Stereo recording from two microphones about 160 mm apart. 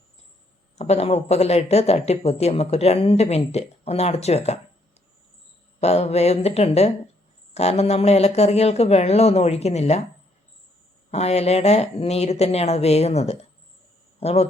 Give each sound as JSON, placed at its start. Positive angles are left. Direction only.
{"t": 0.8, "sound": "speech", "side_deg": 40}
{"t": 5.8, "sound": "speech", "side_deg": 40}
{"t": 11.1, "sound": "a man's voice", "side_deg": 40}